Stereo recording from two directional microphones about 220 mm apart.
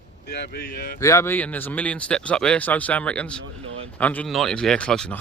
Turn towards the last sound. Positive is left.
turn(degrees=5)  # may be behind; listen again after turning